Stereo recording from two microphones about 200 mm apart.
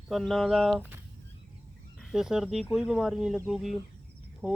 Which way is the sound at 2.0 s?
Centre (ahead or behind).